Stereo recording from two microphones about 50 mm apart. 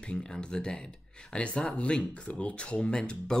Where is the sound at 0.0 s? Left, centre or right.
Centre.